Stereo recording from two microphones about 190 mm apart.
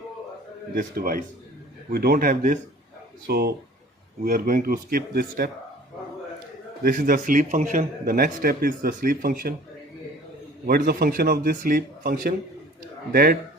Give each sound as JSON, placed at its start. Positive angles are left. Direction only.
{"t": 0.7, "sound": "a man's voice", "side_deg": -50}
{"t": 6.8, "sound": "a man's voice", "side_deg": -45}
{"t": 10.7, "sound": "a man's voice", "side_deg": -55}